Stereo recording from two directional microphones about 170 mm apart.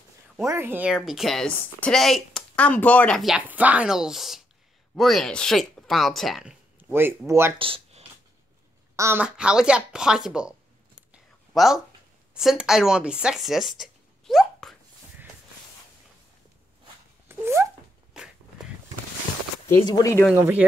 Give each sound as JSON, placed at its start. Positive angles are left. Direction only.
{"t": 0.5, "sound": "a woman's voice", "side_deg": -15}
{"t": 6.9, "sound": "speech", "side_deg": -15}
{"t": 7.5, "sound": "speech", "side_deg": -30}
{"t": 8.9, "sound": "a woman's voice", "side_deg": -15}
{"t": 11.5, "sound": "speech", "side_deg": 0}
{"t": 17.3, "sound": "a sound", "side_deg": -15}
{"t": 19.9, "sound": "speech", "side_deg": 20}
{"t": 20.3, "sound": "speech", "side_deg": -10}